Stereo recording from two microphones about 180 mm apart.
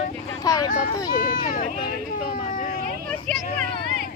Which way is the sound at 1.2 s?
45° left (ahead or behind).